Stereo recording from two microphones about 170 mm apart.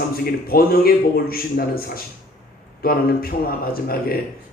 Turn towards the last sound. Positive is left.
turn(degrees=60)  # may be behind; listen again after turning